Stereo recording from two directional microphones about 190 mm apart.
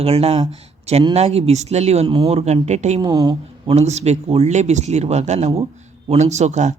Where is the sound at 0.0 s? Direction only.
30° right (ahead or behind).